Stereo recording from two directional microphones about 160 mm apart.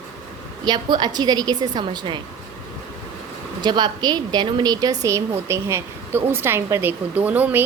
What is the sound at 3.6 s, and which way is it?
A woman's voice, 25° right (ahead or behind).